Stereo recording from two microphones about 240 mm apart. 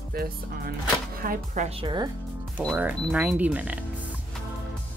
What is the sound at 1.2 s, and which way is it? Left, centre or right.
Speech, right.